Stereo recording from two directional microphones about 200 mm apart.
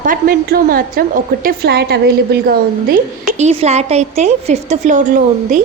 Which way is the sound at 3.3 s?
30° right (ahead or behind).